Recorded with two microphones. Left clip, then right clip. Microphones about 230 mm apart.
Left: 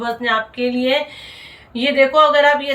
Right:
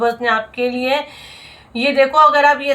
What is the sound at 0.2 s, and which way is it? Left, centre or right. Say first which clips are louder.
A woman's voice: right 1 dB; centre.